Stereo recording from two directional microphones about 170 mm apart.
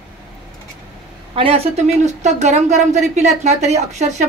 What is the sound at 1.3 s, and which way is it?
A woman's voice, 35° right (ahead or behind).